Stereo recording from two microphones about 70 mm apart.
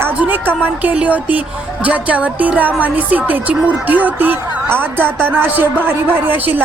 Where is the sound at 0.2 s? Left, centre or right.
Right.